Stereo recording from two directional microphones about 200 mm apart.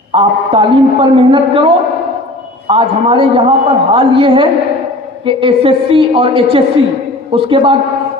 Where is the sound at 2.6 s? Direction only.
25° right (ahead or behind).